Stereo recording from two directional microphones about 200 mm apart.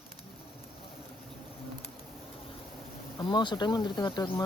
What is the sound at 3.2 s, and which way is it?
Speech, 20° left (ahead or behind).